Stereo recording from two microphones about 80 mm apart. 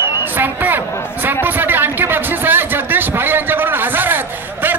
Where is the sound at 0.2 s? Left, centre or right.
Right.